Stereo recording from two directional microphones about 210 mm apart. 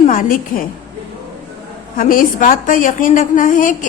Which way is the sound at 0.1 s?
40° left (ahead or behind).